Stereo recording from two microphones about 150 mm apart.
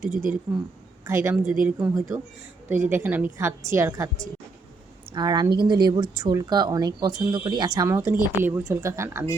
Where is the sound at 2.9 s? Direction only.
15° right (ahead or behind).